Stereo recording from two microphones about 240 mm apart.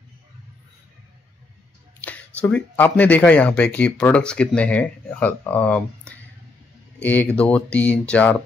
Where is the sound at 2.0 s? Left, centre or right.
Centre.